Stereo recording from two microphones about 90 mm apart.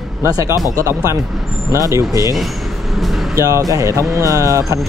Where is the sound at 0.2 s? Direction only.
35° right (ahead or behind).